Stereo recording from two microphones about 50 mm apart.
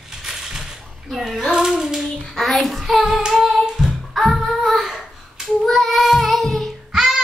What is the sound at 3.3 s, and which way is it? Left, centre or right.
Singing, centre.